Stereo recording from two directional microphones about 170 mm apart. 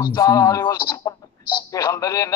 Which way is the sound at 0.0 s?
20° left (ahead or behind).